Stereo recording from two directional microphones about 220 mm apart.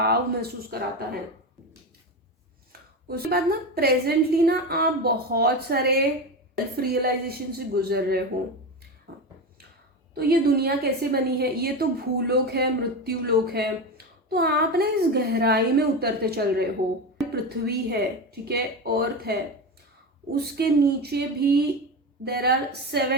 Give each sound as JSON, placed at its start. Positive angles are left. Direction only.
{"t": 0.0, "sound": "a woman's voice", "side_deg": -45}
{"t": 3.1, "sound": "a woman's voice", "side_deg": -45}
{"t": 9.1, "sound": "a sound", "side_deg": -50}
{"t": 10.2, "sound": "a woman's voice", "side_deg": -45}